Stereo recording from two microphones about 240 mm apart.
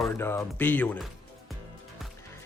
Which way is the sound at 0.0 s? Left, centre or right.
Centre.